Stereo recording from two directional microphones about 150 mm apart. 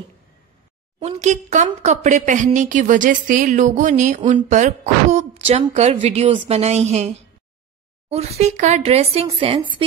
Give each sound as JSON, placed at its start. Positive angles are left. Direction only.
{"t": 0.9, "sound": "speech", "side_deg": -45}